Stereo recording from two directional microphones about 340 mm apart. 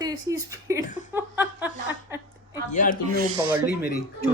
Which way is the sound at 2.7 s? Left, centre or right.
Left.